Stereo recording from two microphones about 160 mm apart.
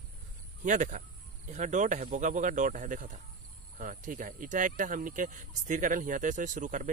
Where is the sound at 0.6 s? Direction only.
50° right (ahead or behind).